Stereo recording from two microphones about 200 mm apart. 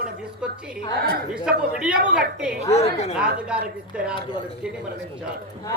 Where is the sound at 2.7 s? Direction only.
30° left (ahead or behind).